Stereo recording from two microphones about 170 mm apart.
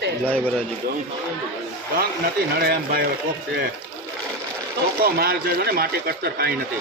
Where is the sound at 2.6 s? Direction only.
65° right (ahead or behind).